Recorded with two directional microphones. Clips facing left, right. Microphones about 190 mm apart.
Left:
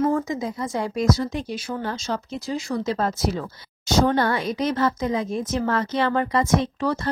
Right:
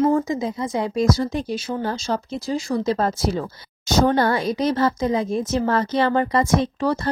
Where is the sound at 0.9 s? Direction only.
30° right (ahead or behind).